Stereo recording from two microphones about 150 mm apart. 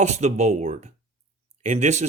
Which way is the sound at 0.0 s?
50° right (ahead or behind).